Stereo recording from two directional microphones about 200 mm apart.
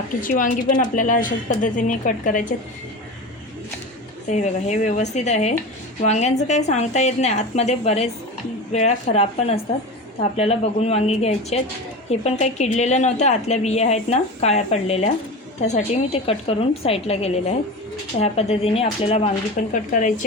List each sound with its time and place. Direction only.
0.2 s a woman's voice: 45° left (ahead or behind)
4.3 s a woman's voice: 35° left (ahead or behind)
19.7 s a woman's voice: 40° left (ahead or behind)